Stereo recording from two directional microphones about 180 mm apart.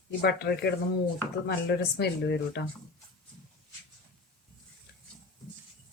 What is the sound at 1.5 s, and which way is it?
Speech, 65° left (ahead or behind).